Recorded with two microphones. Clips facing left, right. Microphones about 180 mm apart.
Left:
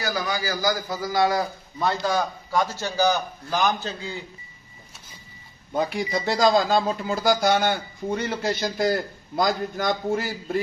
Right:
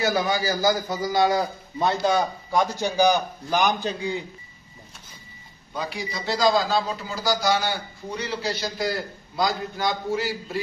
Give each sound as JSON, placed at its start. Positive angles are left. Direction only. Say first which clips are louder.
{"t": 0.0, "sound": "a man's voice", "louder": "right 4 dB", "side_deg": -25}
{"t": 5.7, "sound": "speech", "louder": "left 6 dB", "side_deg": 50}